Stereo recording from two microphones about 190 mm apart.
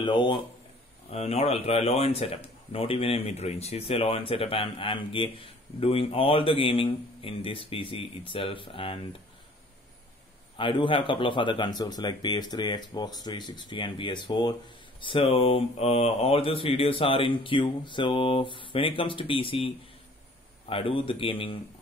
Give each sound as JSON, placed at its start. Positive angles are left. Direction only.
{"t": 0.0, "sound": "a man's voice", "side_deg": 25}
{"t": 10.6, "sound": "a man's voice", "side_deg": 25}